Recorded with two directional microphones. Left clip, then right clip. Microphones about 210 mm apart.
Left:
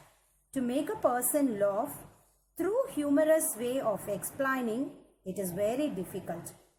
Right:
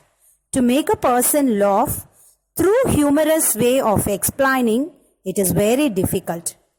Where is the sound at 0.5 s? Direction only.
45° right (ahead or behind).